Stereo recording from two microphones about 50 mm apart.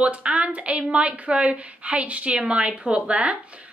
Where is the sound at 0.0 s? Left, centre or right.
Right.